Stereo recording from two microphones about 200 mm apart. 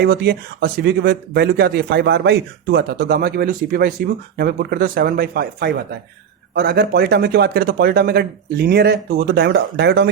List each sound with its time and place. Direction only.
0.0 s speech: 55° right (ahead or behind)